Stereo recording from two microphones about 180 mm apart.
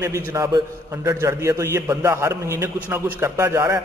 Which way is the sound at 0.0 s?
15° right (ahead or behind).